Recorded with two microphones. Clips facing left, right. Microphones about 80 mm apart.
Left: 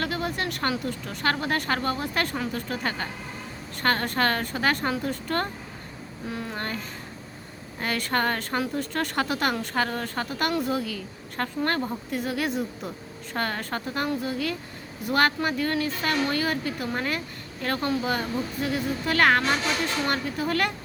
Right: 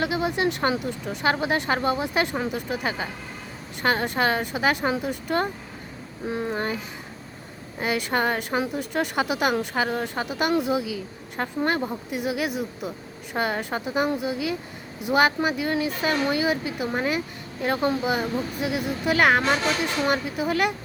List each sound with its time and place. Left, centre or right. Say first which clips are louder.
0.0 s speech: right 5 dB; centre
6.2 s speech: right 5 dB; right